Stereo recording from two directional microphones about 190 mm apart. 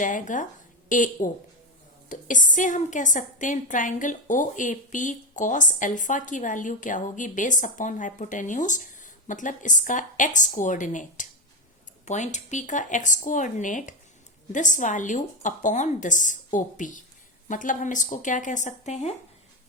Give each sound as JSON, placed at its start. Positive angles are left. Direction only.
{"t": 0.0, "sound": "a woman's voice", "side_deg": 40}